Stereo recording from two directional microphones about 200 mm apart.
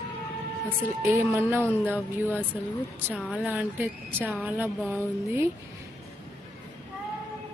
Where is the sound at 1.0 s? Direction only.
10° right (ahead or behind).